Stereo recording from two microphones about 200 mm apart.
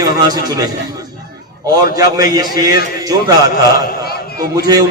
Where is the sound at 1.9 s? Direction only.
15° right (ahead or behind).